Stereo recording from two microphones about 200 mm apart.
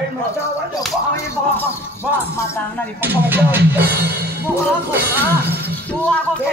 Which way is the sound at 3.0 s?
10° right (ahead or behind).